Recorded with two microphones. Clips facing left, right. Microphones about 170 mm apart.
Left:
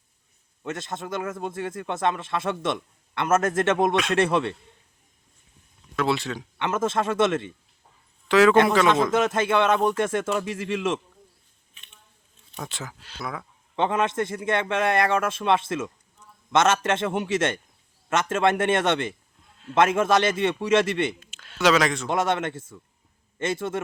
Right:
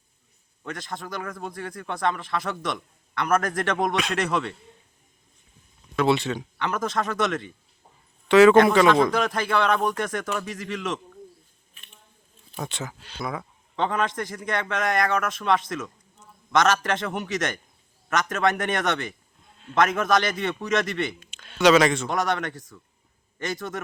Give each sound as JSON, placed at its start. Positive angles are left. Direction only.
{"t": 0.6, "sound": "a man's voice", "side_deg": 25}
{"t": 6.0, "sound": "speech", "side_deg": 0}
{"t": 6.6, "sound": "a man's voice", "side_deg": 25}
{"t": 8.3, "sound": "a man's voice", "side_deg": 0}
{"t": 9.1, "sound": "a man's voice", "side_deg": 20}
{"t": 12.5, "sound": "speech", "side_deg": 0}
{"t": 13.7, "sound": "a man's voice", "side_deg": 25}
{"t": 21.2, "sound": "speech", "side_deg": 0}
{"t": 22.1, "sound": "a man's voice", "side_deg": 25}